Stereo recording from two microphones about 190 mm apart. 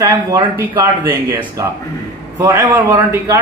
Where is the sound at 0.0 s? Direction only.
15° right (ahead or behind).